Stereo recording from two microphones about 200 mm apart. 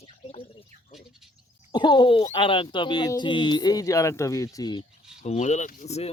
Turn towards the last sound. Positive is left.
turn(degrees=30)  # may be behind; listen again after turning